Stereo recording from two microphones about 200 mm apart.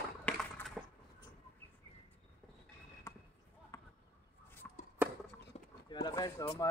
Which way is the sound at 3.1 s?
15° left (ahead or behind).